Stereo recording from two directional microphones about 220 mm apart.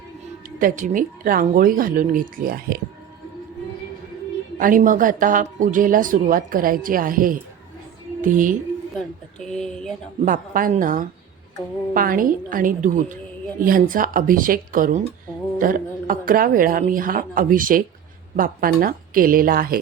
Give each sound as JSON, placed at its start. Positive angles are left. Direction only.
{"t": 0.4, "sound": "speech", "side_deg": -40}
{"t": 4.5, "sound": "speech", "side_deg": -35}
{"t": 9.4, "sound": "speech", "side_deg": 0}
{"t": 10.2, "sound": "speech", "side_deg": -40}